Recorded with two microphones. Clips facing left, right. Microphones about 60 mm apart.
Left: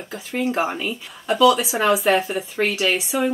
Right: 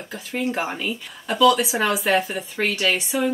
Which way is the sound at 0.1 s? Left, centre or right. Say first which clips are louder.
Left 2 dB; centre.